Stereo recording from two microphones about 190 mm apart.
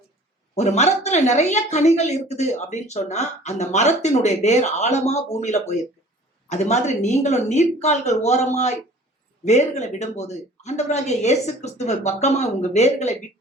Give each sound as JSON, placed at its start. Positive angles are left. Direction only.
{"t": 0.5, "sound": "a woman's voice", "side_deg": 35}